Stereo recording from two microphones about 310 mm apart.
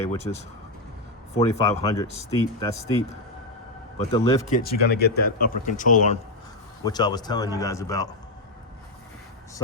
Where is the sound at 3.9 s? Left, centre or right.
Left.